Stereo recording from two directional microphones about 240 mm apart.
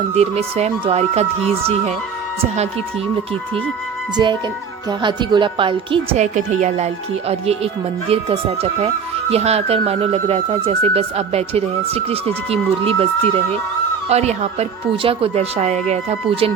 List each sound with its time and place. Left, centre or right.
0.1 s speech: right
4.2 s speech: centre
14.1 s speech: right